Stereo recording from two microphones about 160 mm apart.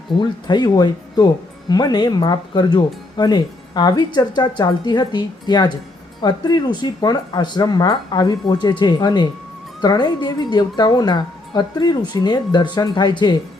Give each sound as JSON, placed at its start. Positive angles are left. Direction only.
{"t": 0.1, "sound": "speech", "side_deg": 30}